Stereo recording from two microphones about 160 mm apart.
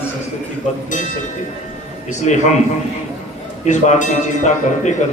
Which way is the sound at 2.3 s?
50° left (ahead or behind).